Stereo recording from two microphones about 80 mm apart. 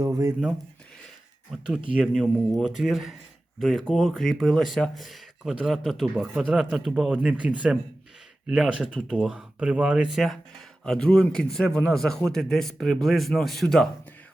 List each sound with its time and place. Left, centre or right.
0.0 s speech: right
1.9 s speech: centre
7.2 s speech: centre
10.8 s speech: centre